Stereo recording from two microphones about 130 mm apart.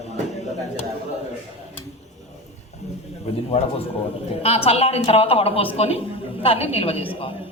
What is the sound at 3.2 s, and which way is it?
Speech, 50° left (ahead or behind).